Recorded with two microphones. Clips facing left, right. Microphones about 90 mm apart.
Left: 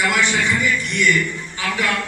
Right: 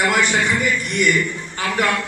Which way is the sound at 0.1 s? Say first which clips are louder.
Right 1 dB; 50° right (ahead or behind).